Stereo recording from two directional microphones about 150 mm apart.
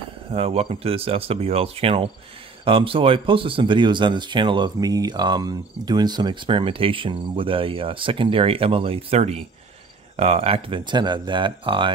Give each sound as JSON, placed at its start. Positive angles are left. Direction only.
{"t": 0.3, "sound": "speech", "side_deg": -40}